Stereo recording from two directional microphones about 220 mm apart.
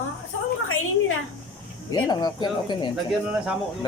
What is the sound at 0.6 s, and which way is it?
Speech, 65° left (ahead or behind).